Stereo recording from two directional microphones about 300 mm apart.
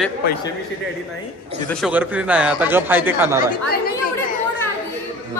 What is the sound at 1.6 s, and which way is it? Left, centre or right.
A man's voice, centre.